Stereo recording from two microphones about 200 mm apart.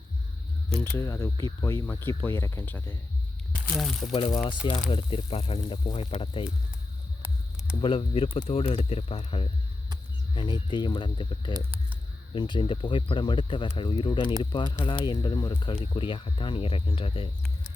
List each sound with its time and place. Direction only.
0.9 s speech: 15° left (ahead or behind)
4.1 s speech: 25° left (ahead or behind)
7.8 s speech: 25° left (ahead or behind)
11.5 s speech: 10° right (ahead or behind)
12.3 s speech: 25° left (ahead or behind)